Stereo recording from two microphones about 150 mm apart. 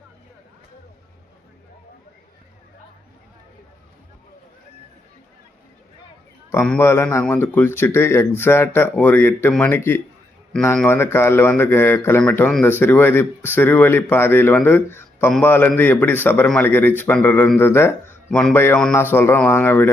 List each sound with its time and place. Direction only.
6.5 s speech: 15° left (ahead or behind)
18.3 s speech: 5° left (ahead or behind)
18.5 s speech: 15° left (ahead or behind)